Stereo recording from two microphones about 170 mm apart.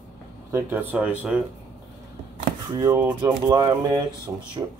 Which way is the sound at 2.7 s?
20° right (ahead or behind).